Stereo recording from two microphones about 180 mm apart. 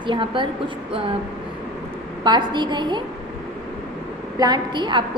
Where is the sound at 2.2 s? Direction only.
25° right (ahead or behind).